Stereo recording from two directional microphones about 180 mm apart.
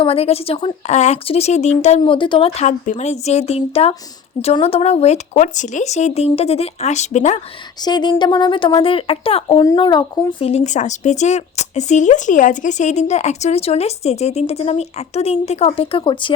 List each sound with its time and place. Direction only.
0.0 s speech: 35° left (ahead or behind)
7.8 s speech: 25° left (ahead or behind)
10.5 s speech: 40° left (ahead or behind)